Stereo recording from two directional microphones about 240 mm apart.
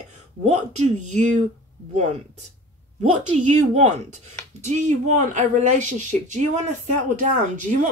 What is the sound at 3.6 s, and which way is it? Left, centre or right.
A woman's voice, right.